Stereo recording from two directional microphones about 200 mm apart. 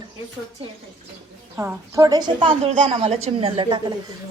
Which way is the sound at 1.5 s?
10° right (ahead or behind).